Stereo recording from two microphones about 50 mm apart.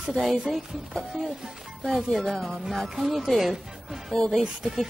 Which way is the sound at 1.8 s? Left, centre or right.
Centre.